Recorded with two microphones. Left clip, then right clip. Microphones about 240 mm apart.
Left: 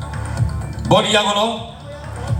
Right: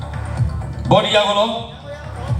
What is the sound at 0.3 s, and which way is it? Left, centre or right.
Music, left.